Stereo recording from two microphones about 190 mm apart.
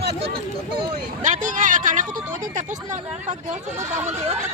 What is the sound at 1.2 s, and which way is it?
Vehicle, 40° right (ahead or behind).